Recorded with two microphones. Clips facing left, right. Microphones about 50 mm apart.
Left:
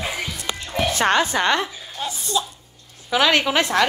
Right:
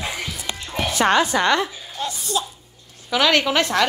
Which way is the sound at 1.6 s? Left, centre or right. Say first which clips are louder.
Right 1 dB; centre.